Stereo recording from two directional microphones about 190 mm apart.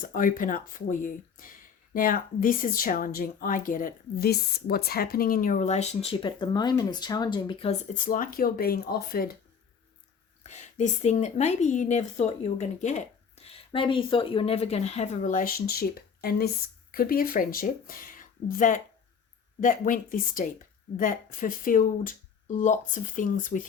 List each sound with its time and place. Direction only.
0.0 s speech: 45° left (ahead or behind); by 7.8 s 25° left (ahead or behind)
7.9 s speech: 45° left (ahead or behind)
10.4 s a woman's voice: 35° left (ahead or behind)